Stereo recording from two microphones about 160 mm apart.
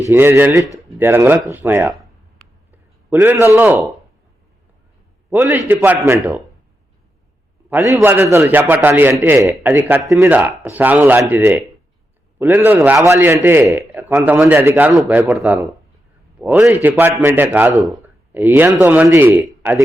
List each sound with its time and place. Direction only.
0.1 s a man's voice: 15° right (ahead or behind)
3.1 s a man's voice: 15° right (ahead or behind)
5.3 s a man's voice: 15° right (ahead or behind)
7.7 s a man's voice: 15° right (ahead or behind)
14.4 s a man's voice: 15° right (ahead or behind)